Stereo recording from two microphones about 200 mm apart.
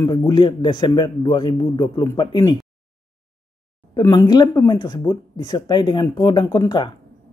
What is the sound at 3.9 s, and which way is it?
A man's voice, 20° left (ahead or behind).